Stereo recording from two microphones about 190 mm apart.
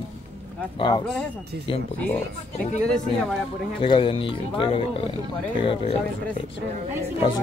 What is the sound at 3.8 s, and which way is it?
Speech, 25° left (ahead or behind).